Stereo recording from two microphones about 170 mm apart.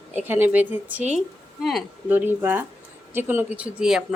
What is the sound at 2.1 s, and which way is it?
A woman's voice, 10° right (ahead or behind).